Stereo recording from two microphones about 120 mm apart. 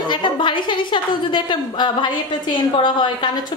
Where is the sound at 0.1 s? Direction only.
40° left (ahead or behind).